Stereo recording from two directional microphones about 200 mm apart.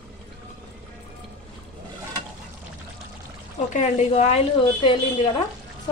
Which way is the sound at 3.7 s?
35° left (ahead or behind).